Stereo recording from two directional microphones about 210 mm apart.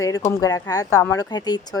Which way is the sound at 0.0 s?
15° left (ahead or behind).